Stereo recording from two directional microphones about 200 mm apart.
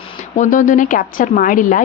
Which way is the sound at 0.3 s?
40° left (ahead or behind).